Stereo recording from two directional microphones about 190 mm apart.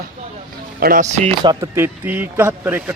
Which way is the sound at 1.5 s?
15° right (ahead or behind).